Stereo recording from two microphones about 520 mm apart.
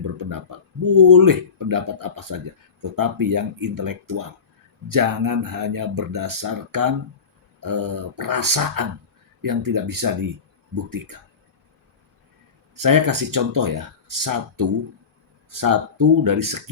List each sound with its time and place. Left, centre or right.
0.9 s speech: right
12.7 s speech: right